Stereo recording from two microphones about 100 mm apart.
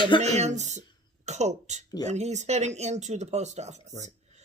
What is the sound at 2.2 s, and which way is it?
Speech, 90° right.